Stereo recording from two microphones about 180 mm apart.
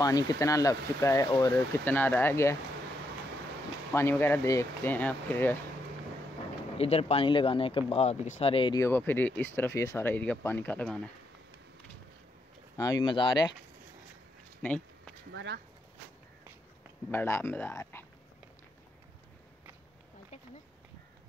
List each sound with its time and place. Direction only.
0.0 s speech: 20° left (ahead or behind)
3.9 s speech: 15° left (ahead or behind)
6.8 s speech: 35° left (ahead or behind)
8.7 s speech: 15° left (ahead or behind)
12.7 s speech: 20° left (ahead or behind)
14.6 s speech: 10° left (ahead or behind)
15.3 s speech: 75° right (ahead or behind)
17.1 s speech: 10° left (ahead or behind)